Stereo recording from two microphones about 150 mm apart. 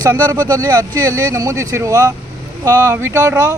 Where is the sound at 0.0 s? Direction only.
25° right (ahead or behind).